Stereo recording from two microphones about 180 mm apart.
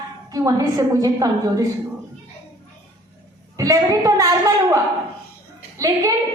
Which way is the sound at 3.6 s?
20° right (ahead or behind).